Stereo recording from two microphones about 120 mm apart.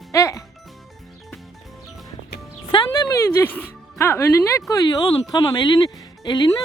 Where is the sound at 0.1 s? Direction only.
25° left (ahead or behind).